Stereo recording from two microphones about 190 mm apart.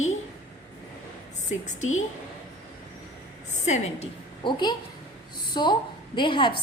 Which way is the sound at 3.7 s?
40° left (ahead or behind).